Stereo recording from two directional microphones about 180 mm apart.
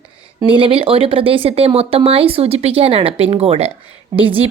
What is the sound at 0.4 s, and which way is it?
Speech, 30° right (ahead or behind).